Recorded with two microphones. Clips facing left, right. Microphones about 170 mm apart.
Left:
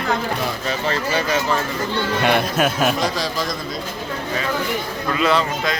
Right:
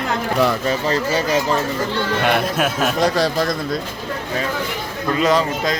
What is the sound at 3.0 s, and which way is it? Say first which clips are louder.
Speech: right 5 dB; 60° right (ahead or behind).